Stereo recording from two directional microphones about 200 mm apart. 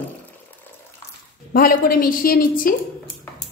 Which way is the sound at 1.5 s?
45° left (ahead or behind).